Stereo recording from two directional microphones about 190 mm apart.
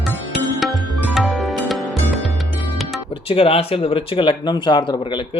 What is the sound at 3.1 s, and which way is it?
Speech, 30° left (ahead or behind).